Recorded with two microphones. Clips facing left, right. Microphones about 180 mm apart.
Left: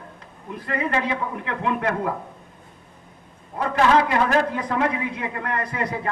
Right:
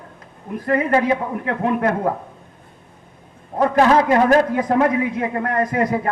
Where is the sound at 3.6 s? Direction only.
45° right (ahead or behind).